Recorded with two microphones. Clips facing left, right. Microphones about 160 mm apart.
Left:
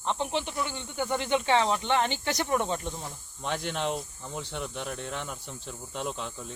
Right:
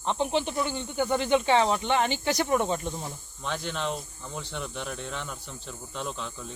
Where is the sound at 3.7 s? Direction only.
10° left (ahead or behind).